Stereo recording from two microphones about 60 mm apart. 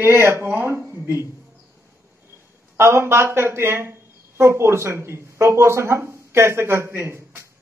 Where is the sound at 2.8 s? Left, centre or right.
Right.